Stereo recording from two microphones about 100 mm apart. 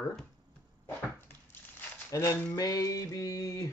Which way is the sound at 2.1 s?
35° left (ahead or behind).